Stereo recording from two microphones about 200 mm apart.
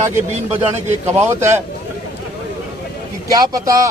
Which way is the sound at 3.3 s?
15° right (ahead or behind).